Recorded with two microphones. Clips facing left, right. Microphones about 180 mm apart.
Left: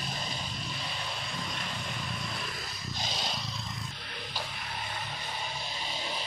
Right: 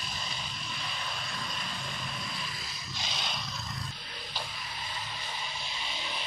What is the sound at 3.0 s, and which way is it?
Vehicle, 40° left (ahead or behind).